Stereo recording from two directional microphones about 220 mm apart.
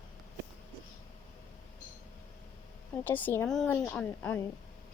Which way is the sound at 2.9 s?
10° left (ahead or behind).